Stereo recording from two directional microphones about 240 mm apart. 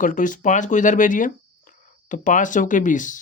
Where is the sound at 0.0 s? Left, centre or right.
Left.